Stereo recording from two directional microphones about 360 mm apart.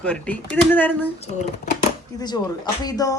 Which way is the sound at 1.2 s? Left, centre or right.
Centre.